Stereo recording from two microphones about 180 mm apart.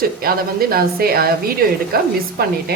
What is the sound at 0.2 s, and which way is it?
Speech, 55° right (ahead or behind).